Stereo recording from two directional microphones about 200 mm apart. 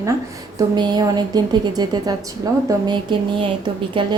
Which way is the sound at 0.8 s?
20° right (ahead or behind).